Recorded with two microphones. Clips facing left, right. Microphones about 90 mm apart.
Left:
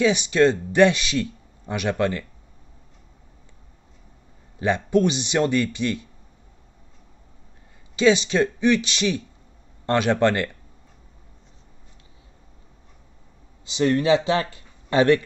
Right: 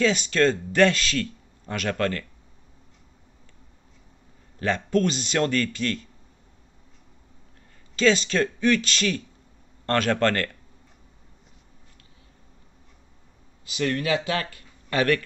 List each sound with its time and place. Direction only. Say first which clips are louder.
0.0 s a man's voice: left 3 dB; 15° left (ahead or behind)
4.6 s a man's voice: left 3 dB; 15° left (ahead or behind)
7.9 s a man's voice: left 3 dB; 15° left (ahead or behind)
13.7 s speech: left 6 dB; 25° left (ahead or behind)